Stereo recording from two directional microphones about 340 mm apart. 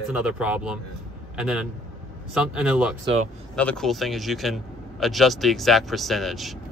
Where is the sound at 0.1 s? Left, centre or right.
Centre.